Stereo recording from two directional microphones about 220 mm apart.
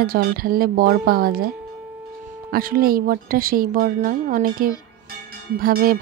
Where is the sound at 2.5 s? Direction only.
40° right (ahead or behind).